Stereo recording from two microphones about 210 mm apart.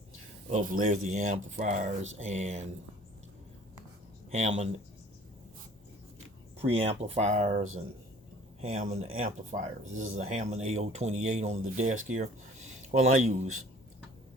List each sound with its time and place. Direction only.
0.5 s speech: 40° right (ahead or behind)
4.3 s speech: 30° right (ahead or behind)
6.6 s speech: 30° right (ahead or behind)